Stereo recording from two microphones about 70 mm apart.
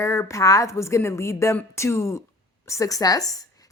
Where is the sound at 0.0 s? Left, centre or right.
Left.